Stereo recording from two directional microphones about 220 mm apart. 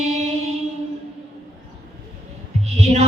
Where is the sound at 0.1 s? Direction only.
30° right (ahead or behind).